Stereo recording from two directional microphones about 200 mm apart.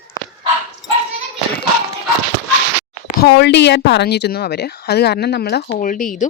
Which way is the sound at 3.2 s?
55° left (ahead or behind).